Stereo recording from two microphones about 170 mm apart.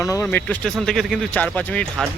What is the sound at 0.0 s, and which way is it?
Speech, 20° left (ahead or behind).